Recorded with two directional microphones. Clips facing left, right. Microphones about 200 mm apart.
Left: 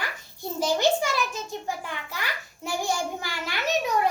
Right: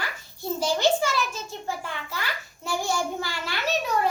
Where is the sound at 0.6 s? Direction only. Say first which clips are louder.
Even; 20° left (ahead or behind).